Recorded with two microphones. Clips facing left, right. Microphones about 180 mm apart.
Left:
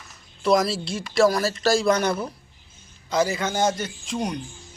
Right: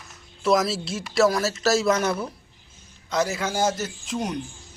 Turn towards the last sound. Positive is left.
turn(degrees=-5)  # may be behind; listen again after turning